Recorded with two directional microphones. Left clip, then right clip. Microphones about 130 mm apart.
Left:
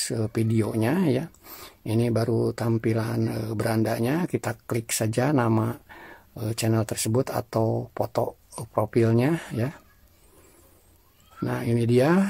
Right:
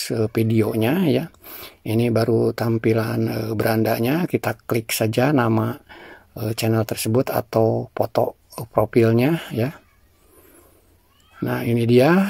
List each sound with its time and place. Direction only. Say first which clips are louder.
0.0 s speech: right 6 dB; 20° right (ahead or behind)
1.4 s a sound: right 5 dB; 10° right (ahead or behind)
1.8 s speech: right 5 dB; 20° right (ahead or behind)
11.4 s speech: right 5 dB; 25° right (ahead or behind)